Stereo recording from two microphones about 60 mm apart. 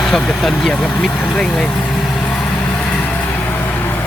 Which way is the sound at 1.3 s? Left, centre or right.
Centre.